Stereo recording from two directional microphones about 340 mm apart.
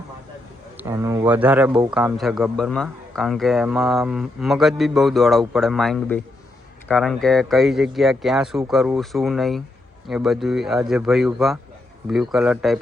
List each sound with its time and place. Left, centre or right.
0.8 s a man's voice: centre